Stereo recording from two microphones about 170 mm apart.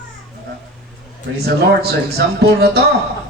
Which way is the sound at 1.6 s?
70° right (ahead or behind).